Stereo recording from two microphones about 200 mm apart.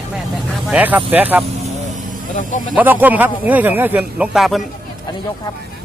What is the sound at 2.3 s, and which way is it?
Speech, 40° left (ahead or behind).